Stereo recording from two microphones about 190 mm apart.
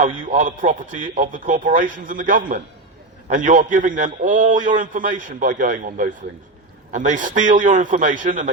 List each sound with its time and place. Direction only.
0.0 s a man's voice: 40° right (ahead or behind)